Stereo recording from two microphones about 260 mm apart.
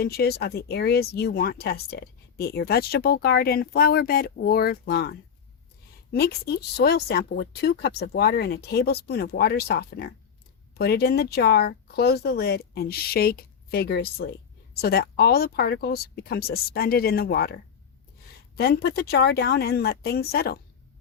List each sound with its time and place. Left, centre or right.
0.0 s speech: left